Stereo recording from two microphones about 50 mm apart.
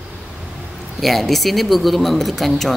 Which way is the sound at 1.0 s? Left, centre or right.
Centre.